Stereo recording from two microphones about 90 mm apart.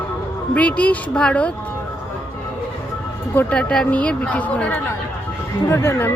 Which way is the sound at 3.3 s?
10° left (ahead or behind).